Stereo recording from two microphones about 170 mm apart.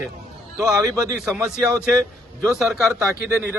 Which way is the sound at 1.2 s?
Centre (ahead or behind).